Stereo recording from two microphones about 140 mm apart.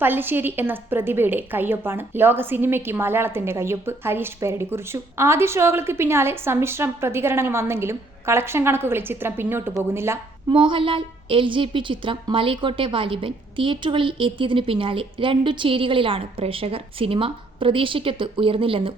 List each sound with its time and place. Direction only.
0.0 s a woman's voice: 15° right (ahead or behind)
10.5 s a woman's voice: 35° right (ahead or behind)